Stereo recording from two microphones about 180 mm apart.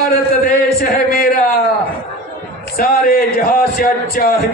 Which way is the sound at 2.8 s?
55° left (ahead or behind).